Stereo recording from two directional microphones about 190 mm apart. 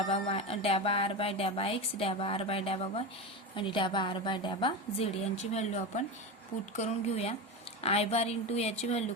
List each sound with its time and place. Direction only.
0.1 s a woman's voice: 30° left (ahead or behind)